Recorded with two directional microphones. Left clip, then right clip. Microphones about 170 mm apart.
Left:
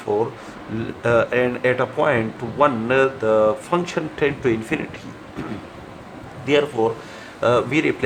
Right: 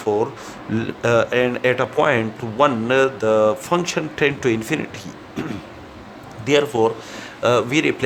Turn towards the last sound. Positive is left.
turn(degrees=-50)  # may be behind; listen again after turning